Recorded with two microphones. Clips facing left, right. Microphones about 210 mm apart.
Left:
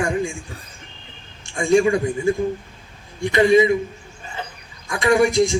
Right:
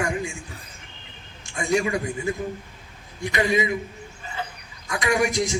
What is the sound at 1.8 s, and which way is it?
A man's voice, 25° left (ahead or behind).